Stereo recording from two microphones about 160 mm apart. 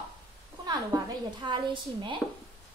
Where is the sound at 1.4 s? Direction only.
30° right (ahead or behind).